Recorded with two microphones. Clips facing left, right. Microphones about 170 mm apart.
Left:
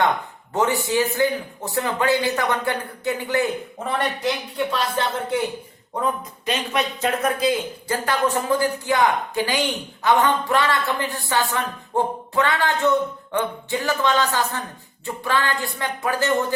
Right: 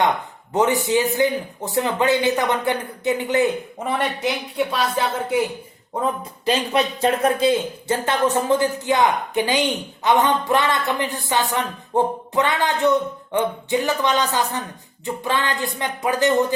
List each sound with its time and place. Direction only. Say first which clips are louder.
0.5 s speech: right 2 dB; 20° right (ahead or behind)
3.9 s speech: even; 5° right (ahead or behind)
6.0 s speech: right 1 dB; 30° right (ahead or behind)